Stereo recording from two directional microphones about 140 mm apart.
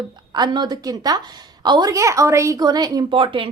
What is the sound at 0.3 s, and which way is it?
A woman's voice, 30° right (ahead or behind).